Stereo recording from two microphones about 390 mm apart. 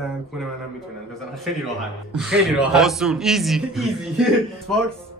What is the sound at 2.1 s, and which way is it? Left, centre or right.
A man's voice, centre.